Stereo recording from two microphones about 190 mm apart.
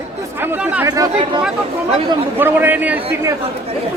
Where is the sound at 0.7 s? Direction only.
10° right (ahead or behind).